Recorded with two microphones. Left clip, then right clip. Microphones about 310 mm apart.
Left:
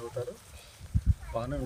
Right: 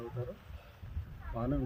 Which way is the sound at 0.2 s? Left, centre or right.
Left.